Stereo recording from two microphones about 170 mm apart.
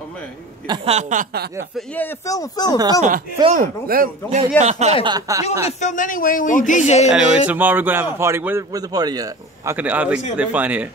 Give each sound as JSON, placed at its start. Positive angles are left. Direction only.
{"t": 0.8, "sound": "a sound", "side_deg": -40}
{"t": 2.2, "sound": "speech", "side_deg": 20}
{"t": 3.4, "sound": "speech", "side_deg": -50}
{"t": 5.0, "sound": "speech", "side_deg": -25}
{"t": 5.7, "sound": "speech", "side_deg": 45}
{"t": 7.2, "sound": "a man's voice", "side_deg": -5}
{"t": 9.8, "sound": "a man's voice", "side_deg": -10}